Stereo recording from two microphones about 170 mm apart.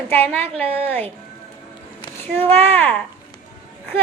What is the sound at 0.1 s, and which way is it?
A woman's voice, 10° left (ahead or behind).